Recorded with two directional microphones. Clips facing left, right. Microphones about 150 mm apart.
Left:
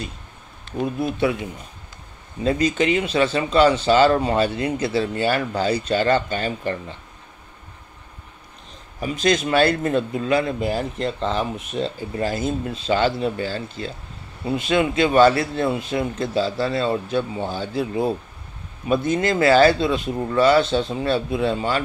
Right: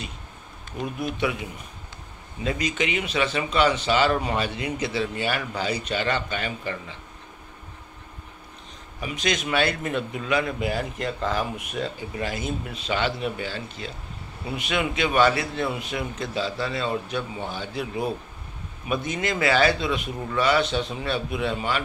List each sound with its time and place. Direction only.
0.9 s speech: 30° left (ahead or behind)
2.4 s speech: 35° left (ahead or behind)
9.0 s speech: 35° left (ahead or behind)